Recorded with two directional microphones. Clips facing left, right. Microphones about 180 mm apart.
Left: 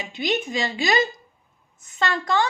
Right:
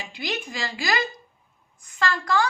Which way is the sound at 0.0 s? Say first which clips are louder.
Left 6 dB; 20° left (ahead or behind).